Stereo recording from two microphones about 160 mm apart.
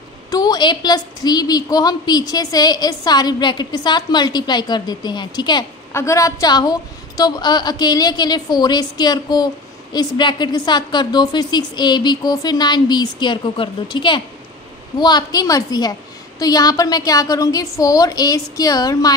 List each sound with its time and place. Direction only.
0.3 s a woman's voice: 25° left (ahead or behind)